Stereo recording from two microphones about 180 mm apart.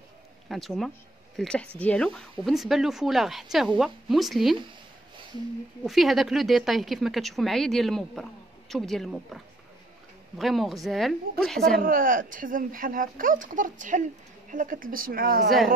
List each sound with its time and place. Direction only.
0.5 s speech: centre (ahead or behind)
5.9 s speech: centre (ahead or behind)
11.8 s speech: 50° right (ahead or behind)